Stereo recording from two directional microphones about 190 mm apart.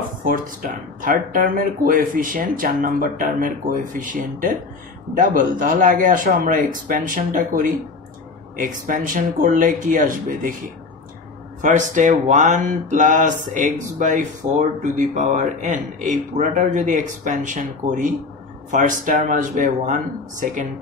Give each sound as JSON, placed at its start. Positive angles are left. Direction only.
{"t": 0.2, "sound": "speech", "side_deg": -45}
{"t": 11.6, "sound": "a man's voice", "side_deg": -40}